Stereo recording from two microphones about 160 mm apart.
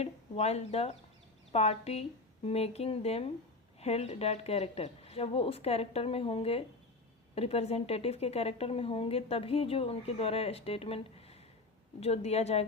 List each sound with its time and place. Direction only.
0.0 s a woman's voice: 40° left (ahead or behind)